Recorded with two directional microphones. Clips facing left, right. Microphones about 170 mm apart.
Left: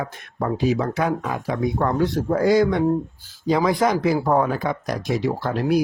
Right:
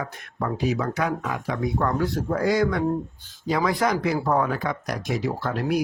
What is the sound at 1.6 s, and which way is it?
Speech, 20° left (ahead or behind).